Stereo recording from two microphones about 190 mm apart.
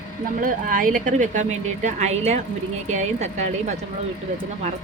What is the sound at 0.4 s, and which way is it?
A woman's voice, 45° right (ahead or behind).